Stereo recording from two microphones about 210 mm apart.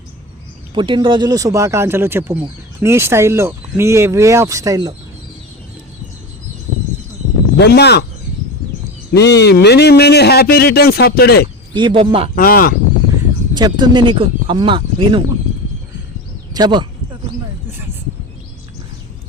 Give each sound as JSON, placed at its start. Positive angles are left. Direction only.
{"t": 0.7, "sound": "speech", "side_deg": -20}
{"t": 7.5, "sound": "a man's voice", "side_deg": 50}
{"t": 9.1, "sound": "a man's voice", "side_deg": 55}
{"t": 11.7, "sound": "speech", "side_deg": -20}
{"t": 12.4, "sound": "a man's voice", "side_deg": 45}
{"t": 13.6, "sound": "speech", "side_deg": -20}
{"t": 16.6, "sound": "speech", "side_deg": -20}